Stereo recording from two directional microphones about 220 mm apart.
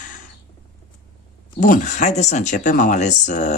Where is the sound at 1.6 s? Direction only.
35° left (ahead or behind).